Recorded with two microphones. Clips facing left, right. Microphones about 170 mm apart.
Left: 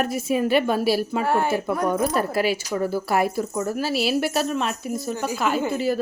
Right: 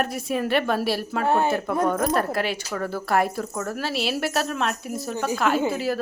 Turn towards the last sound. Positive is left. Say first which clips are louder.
# even
turn(degrees=0)  # may be behind; listen again after turning